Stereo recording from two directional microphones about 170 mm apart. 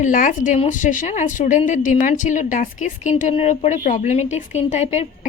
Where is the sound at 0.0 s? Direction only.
50° left (ahead or behind).